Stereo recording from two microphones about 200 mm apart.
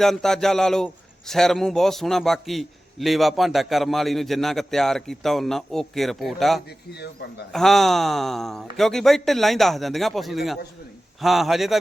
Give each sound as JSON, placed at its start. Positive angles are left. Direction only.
{"t": 0.0, "sound": "a man's voice", "side_deg": 0}
{"t": 7.0, "sound": "speech", "side_deg": 55}
{"t": 7.5, "sound": "a man's voice", "side_deg": 0}